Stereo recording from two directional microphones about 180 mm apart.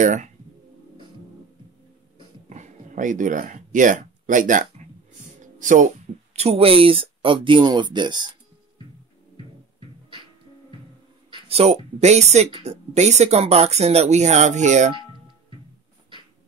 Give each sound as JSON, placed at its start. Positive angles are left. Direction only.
{"t": 0.0, "sound": "speech", "side_deg": -45}
{"t": 2.5, "sound": "speech", "side_deg": -45}
{"t": 5.4, "sound": "music", "side_deg": -45}
{"t": 6.3, "sound": "speech", "side_deg": -35}
{"t": 9.8, "sound": "music", "side_deg": -30}
{"t": 11.2, "sound": "speech", "side_deg": -30}